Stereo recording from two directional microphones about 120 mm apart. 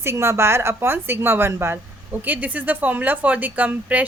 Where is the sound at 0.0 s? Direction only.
20° right (ahead or behind).